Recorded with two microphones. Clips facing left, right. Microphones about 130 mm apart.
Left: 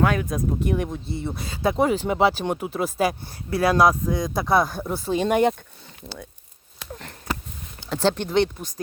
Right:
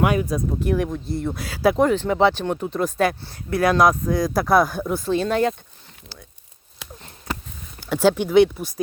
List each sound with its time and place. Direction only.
0.2 s speech: centre (ahead or behind)
1.9 s speech: 5° left (ahead or behind)
3.5 s speech: 30° left (ahead or behind)
4.4 s speech: centre (ahead or behind)
5.2 s speech: 20° left (ahead or behind)
7.8 s speech: 5° right (ahead or behind)